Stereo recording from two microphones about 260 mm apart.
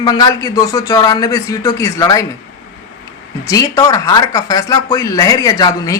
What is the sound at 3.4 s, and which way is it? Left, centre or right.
Speech, centre.